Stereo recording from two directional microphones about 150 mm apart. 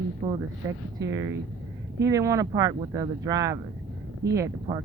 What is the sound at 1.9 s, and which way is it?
Speech, 20° right (ahead or behind).